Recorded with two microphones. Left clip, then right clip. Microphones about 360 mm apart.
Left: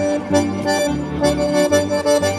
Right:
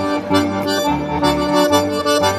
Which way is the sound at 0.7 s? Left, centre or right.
Centre.